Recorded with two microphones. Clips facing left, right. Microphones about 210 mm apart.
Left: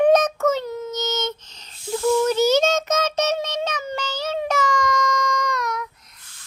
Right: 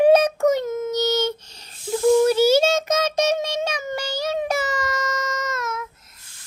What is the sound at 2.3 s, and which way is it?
Child singing, 10° right (ahead or behind).